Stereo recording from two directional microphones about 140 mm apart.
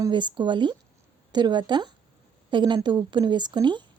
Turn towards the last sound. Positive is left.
turn(degrees=-35)  # may be behind; listen again after turning